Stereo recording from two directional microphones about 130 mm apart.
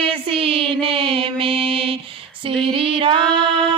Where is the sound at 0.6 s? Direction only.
45° right (ahead or behind).